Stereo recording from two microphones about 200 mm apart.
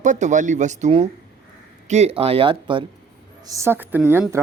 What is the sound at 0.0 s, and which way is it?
A woman's voice, 40° right (ahead or behind).